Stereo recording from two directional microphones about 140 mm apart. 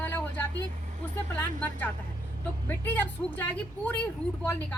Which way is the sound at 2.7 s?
15° left (ahead or behind).